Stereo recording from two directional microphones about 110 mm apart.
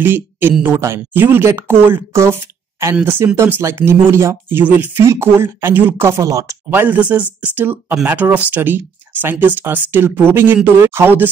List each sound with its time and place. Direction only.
0.0 s speech: 20° right (ahead or behind)
6.7 s speech: 15° right (ahead or behind)